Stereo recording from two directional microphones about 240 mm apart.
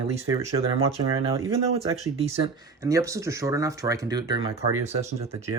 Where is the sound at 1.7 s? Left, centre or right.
Right.